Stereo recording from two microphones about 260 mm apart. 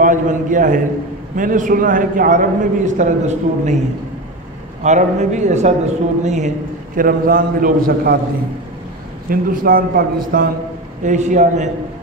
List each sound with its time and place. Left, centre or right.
0.0 s a man's voice: right
4.8 s a man's voice: right
9.3 s a man's voice: right